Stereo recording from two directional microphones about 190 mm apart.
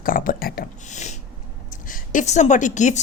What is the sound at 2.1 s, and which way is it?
Speech, 40° left (ahead or behind).